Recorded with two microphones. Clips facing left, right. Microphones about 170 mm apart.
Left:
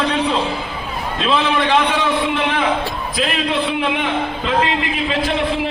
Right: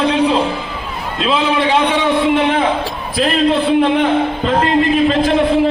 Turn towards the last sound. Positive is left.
turn(degrees=-45)  # may be behind; listen again after turning